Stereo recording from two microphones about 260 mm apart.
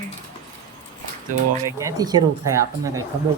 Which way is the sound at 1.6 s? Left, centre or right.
Centre.